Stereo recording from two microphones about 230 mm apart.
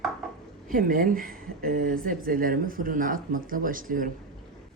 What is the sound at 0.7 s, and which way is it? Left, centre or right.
Speech, right.